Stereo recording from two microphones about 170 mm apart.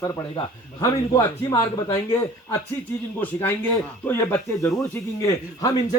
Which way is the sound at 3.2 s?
10° left (ahead or behind).